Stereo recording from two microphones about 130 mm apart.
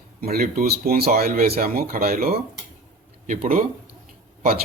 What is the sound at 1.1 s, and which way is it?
Speech, 90° right.